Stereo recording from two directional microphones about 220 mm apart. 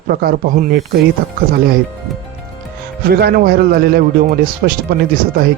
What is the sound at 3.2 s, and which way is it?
Speech, 45° right (ahead or behind).